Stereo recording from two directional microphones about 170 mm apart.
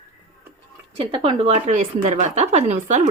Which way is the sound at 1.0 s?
30° right (ahead or behind).